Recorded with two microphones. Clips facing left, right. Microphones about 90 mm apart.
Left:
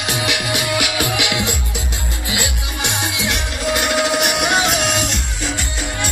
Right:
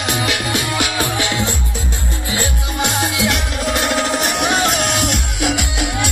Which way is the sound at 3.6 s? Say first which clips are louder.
Left 1 dB; centre (ahead or behind).